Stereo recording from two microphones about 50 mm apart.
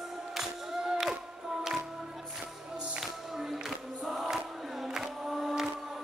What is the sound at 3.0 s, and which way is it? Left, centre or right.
Music, centre.